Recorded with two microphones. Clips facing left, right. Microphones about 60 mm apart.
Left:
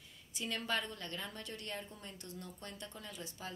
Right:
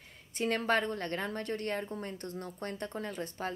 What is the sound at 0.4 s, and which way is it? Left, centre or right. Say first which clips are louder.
A woman's voice: right 9 dB; right.